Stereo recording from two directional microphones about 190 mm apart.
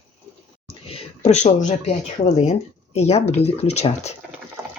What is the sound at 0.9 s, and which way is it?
Speech, 30° left (ahead or behind).